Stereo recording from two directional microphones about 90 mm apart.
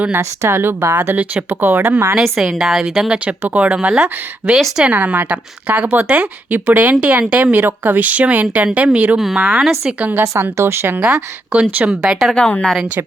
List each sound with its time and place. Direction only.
0.0 s speech: 25° right (ahead or behind)
2.1 s speech: centre (ahead or behind); by 11.0 s 25° right (ahead or behind)
11.0 s speech: 10° right (ahead or behind)
12.4 s a woman's voice: 10° left (ahead or behind)